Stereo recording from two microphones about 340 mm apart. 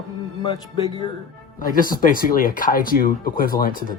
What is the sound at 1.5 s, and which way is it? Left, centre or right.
Speech, left.